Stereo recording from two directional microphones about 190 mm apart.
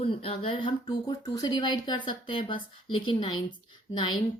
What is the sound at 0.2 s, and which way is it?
Speech, 30° left (ahead or behind).